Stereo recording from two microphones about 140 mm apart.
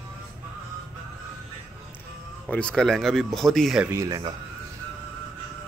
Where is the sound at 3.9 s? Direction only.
25° right (ahead or behind).